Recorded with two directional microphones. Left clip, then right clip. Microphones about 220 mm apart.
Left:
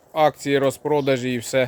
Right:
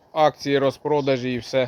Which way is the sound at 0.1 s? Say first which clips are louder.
Even; 15° left (ahead or behind).